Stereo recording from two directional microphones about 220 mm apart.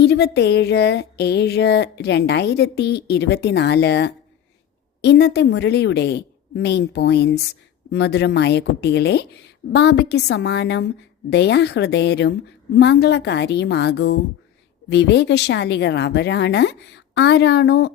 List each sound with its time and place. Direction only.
0.0 s speech: 50° left (ahead or behind)